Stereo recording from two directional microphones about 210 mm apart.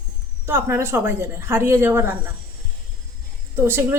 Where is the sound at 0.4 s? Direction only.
10° right (ahead or behind).